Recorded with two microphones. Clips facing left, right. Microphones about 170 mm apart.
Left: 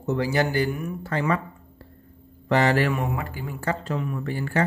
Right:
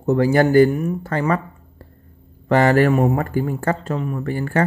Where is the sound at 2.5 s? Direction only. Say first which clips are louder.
Right 6 dB; 50° right (ahead or behind).